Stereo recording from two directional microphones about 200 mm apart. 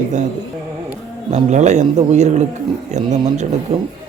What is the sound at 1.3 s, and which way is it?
Speech, 35° right (ahead or behind).